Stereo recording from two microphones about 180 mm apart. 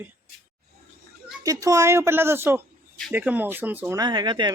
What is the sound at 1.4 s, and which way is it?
Speech, 20° right (ahead or behind).